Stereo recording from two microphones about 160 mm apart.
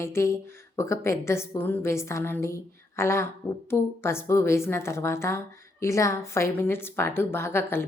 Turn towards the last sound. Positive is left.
turn(degrees=15)  # may be behind; listen again after turning